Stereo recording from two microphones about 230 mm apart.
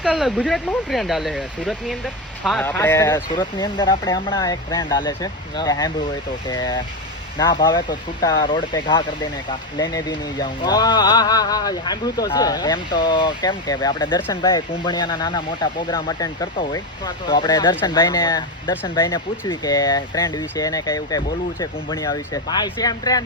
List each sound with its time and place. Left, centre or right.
0.0 s speech: centre